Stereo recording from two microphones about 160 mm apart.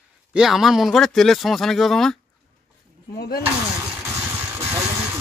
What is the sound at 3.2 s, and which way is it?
Speech, 75° left (ahead or behind).